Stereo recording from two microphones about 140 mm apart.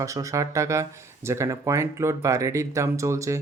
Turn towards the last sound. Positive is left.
turn(degrees=-20)  # may be behind; listen again after turning